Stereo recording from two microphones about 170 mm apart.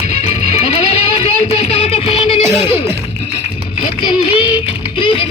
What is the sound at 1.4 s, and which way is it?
Music, 35° left (ahead or behind).